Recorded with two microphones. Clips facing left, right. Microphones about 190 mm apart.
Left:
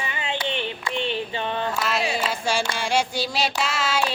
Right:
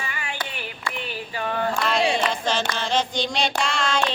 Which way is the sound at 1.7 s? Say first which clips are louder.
Right 2 dB; 5° left (ahead or behind).